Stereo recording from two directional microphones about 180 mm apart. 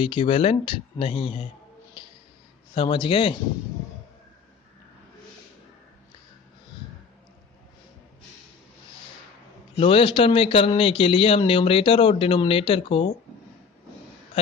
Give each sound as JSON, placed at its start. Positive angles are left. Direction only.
{"t": 0.0, "sound": "speech", "side_deg": 30}
{"t": 2.7, "sound": "speech", "side_deg": 30}
{"t": 9.8, "sound": "a man's voice", "side_deg": 30}